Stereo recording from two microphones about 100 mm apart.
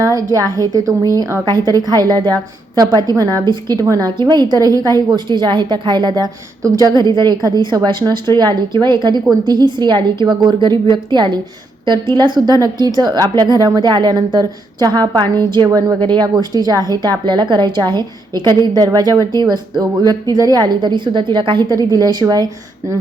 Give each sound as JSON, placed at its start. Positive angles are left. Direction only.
{"t": 0.0, "sound": "a woman's voice", "side_deg": -35}
{"t": 3.8, "sound": "a woman's voice", "side_deg": -35}
{"t": 4.2, "sound": "a woman's voice", "side_deg": -45}